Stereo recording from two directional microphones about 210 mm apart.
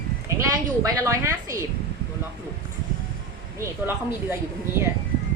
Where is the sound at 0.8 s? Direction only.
15° right (ahead or behind).